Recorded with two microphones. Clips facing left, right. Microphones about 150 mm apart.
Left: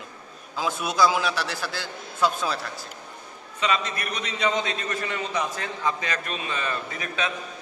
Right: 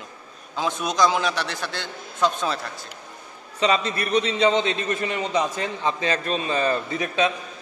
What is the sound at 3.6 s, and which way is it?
A man's voice, 30° right (ahead or behind).